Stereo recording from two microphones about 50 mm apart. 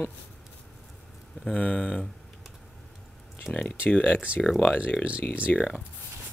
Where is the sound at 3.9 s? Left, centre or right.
Left.